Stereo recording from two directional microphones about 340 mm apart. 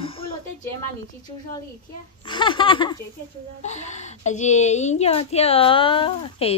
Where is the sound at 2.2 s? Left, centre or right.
Centre.